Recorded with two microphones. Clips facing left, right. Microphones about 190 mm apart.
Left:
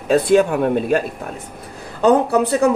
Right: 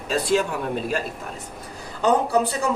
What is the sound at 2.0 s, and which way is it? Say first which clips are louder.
Speech: left 5 dB; 60° left (ahead or behind).